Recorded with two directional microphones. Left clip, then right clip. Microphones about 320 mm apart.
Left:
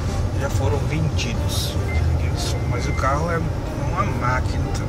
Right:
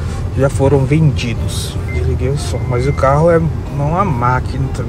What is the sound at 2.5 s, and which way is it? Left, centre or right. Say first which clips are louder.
Speech: right 8 dB; centre.